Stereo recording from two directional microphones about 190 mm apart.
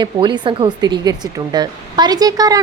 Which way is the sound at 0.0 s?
25° right (ahead or behind).